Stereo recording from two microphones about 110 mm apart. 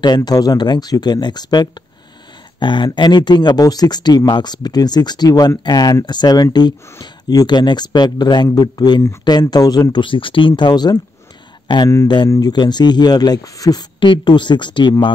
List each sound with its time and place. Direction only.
0.0 s speech: 40° left (ahead or behind)
10.0 s speech: 50° left (ahead or behind)